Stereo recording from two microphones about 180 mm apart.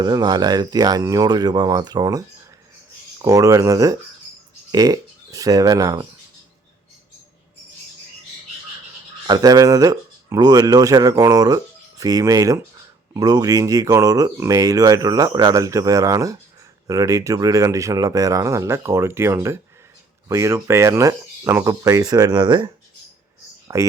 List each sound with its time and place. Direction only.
0.0 s speech: 25° right (ahead or behind)
9.2 s speech: 20° right (ahead or behind)
23.7 s speech: 15° right (ahead or behind)